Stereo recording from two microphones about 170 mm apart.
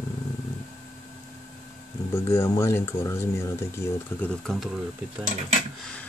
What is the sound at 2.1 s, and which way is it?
Speech, 15° left (ahead or behind).